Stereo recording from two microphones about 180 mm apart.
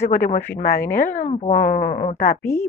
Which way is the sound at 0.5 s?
55° left (ahead or behind).